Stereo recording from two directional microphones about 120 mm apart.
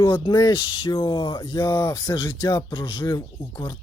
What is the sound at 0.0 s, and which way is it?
Speech, 35° left (ahead or behind).